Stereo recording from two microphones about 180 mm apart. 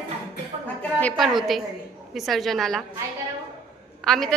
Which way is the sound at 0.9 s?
5° left (ahead or behind).